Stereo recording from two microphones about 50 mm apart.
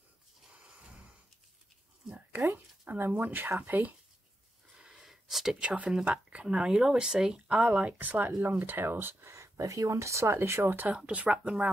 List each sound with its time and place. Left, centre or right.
0.5 s a sound: right
2.9 s speech: right
4.7 s wheeze: centre
5.0 s a sound: centre
6.4 s speech: centre; by 9.3 s right
9.3 s speech: right
10.7 s speech: right
11.0 s speech: right